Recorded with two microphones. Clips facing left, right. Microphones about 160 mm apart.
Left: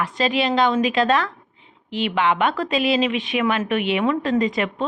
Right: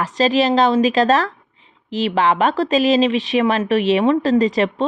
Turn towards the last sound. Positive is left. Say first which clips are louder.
# right 5 dB
turn(degrees=-35)  # may be behind; listen again after turning